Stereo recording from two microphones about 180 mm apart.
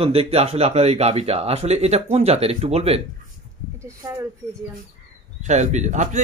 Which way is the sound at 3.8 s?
15° right (ahead or behind).